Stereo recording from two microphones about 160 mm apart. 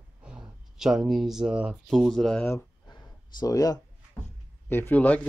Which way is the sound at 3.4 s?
20° left (ahead or behind).